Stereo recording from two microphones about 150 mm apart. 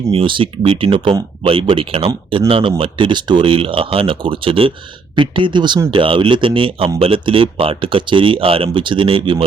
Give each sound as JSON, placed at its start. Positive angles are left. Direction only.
{"t": 0.1, "sound": "speech", "side_deg": -35}